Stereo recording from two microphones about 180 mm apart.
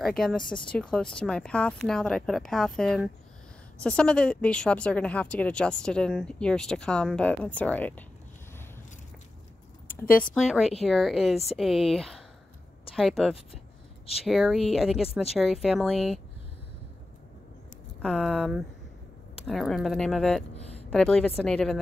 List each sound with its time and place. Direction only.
0.2 s a woman's voice: 5° left (ahead or behind)
10.2 s a woman's voice: centre (ahead or behind)
18.0 s a woman's voice: 5° right (ahead or behind)